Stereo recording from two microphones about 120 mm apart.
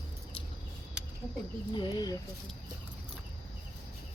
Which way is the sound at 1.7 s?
40° left (ahead or behind).